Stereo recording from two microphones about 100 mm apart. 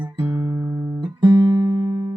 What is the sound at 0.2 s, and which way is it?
Music, 25° right (ahead or behind).